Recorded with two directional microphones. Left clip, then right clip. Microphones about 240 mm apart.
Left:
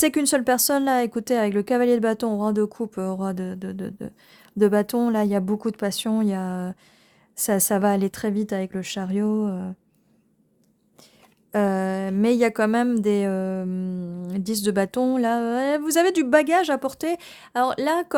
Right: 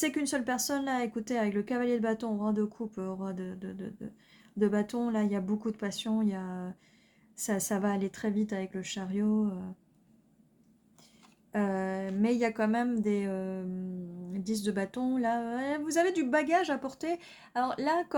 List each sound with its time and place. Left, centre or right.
0.0 s speech: left
11.5 s speech: left